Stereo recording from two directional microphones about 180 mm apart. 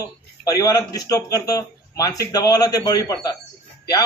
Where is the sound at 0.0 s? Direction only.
20° left (ahead or behind).